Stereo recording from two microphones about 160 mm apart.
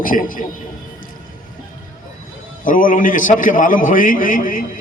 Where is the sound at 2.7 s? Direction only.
55° left (ahead or behind).